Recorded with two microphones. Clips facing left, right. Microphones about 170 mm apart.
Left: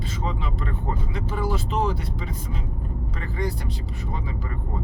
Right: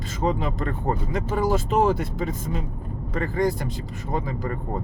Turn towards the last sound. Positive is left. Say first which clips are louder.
# right 5 dB
turn(degrees=-45)  # may be behind; listen again after turning